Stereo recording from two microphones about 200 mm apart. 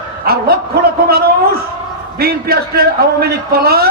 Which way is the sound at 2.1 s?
50° right (ahead or behind).